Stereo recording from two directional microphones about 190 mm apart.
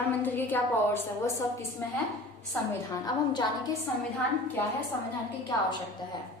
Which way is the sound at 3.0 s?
20° left (ahead or behind).